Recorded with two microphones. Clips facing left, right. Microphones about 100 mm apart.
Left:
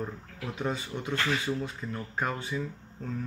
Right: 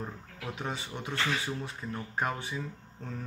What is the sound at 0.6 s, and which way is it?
Speech, 15° right (ahead or behind).